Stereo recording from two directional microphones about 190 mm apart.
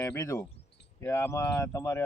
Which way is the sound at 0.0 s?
15° left (ahead or behind).